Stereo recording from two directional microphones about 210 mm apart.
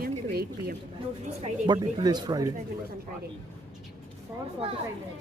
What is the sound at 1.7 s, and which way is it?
Speech, 20° right (ahead or behind).